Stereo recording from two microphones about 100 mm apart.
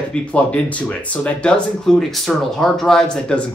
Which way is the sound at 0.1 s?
15° left (ahead or behind).